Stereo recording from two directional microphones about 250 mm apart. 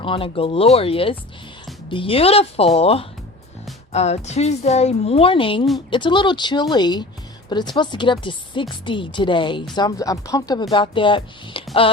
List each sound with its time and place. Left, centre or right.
0.0 s a woman's voice: left